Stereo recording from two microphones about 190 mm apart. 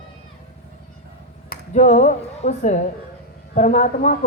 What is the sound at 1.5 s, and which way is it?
A woman's voice, 40° left (ahead or behind).